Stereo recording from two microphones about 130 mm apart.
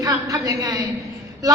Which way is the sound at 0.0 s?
30° right (ahead or behind).